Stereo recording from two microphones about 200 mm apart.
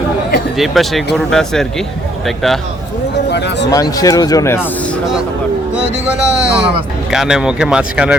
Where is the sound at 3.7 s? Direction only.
15° left (ahead or behind).